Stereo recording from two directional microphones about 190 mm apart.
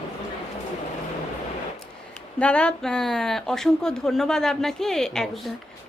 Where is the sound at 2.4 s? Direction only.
5° left (ahead or behind).